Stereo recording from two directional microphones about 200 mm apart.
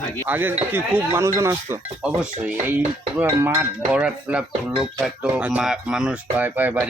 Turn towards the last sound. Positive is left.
turn(degrees=-10)  # may be behind; listen again after turning